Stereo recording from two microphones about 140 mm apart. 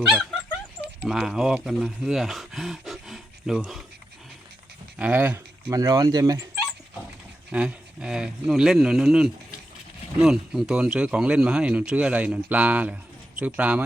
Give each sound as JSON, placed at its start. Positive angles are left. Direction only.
{"t": 1.0, "sound": "speech", "side_deg": -5}
{"t": 4.9, "sound": "speech", "side_deg": -10}
{"t": 5.7, "sound": "speech", "side_deg": -25}
{"t": 7.5, "sound": "speech", "side_deg": -5}